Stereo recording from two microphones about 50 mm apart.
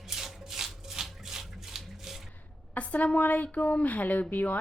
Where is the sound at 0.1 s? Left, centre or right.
Centre.